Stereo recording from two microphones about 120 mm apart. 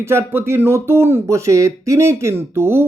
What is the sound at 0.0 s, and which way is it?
Speech, 20° right (ahead or behind).